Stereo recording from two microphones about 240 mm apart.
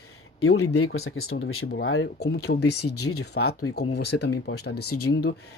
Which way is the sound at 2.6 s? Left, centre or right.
Left.